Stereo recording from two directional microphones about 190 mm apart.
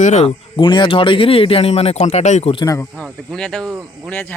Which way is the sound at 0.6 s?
25° left (ahead or behind).